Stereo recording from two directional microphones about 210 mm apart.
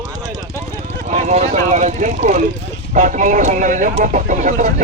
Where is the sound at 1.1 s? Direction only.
30° right (ahead or behind).